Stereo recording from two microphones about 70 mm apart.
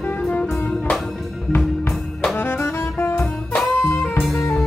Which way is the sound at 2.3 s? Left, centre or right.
Left.